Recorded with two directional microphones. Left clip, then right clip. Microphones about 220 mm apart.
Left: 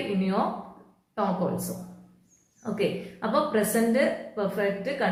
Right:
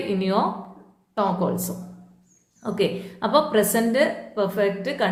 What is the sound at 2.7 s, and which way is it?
A woman's voice, 50° right (ahead or behind).